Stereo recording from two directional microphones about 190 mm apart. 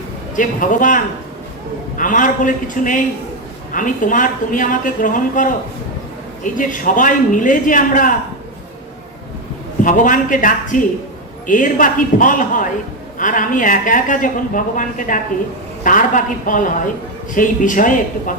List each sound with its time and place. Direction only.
0.3 s speech: 45° left (ahead or behind)
9.8 s speech: 45° left (ahead or behind)